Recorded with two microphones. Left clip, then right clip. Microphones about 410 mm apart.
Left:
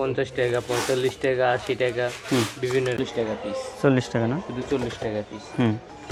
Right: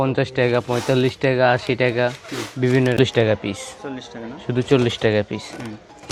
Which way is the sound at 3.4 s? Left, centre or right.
Right.